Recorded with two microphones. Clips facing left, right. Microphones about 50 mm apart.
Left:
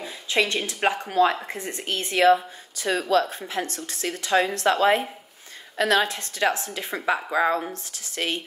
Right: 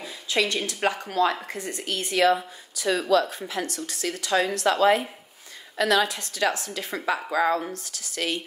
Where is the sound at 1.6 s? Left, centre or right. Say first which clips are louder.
Left 1 dB; left.